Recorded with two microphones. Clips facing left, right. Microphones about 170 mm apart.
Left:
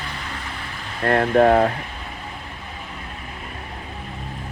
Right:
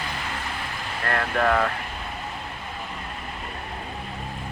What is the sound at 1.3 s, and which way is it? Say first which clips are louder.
Speech: left 7 dB; 40° left (ahead or behind).